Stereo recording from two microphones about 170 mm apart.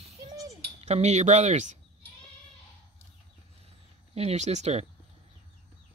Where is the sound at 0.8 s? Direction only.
40° right (ahead or behind).